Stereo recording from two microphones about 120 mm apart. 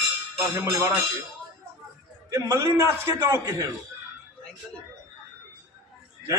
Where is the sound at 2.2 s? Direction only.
25° right (ahead or behind).